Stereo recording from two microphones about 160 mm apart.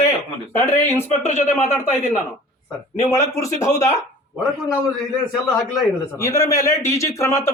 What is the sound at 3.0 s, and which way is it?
Speech, 15° left (ahead or behind).